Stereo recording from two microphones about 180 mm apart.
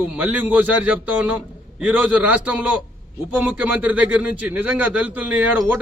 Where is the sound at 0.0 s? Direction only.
10° right (ahead or behind).